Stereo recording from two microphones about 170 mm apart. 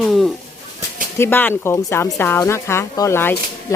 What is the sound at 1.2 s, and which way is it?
Speech, 10° left (ahead or behind).